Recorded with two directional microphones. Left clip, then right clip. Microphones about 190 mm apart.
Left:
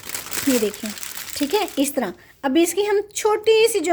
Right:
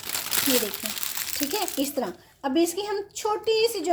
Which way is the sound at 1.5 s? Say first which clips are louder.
Left 7 dB; 45° left (ahead or behind).